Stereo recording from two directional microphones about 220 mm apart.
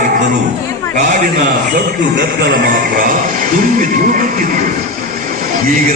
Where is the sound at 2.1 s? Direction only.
40° right (ahead or behind).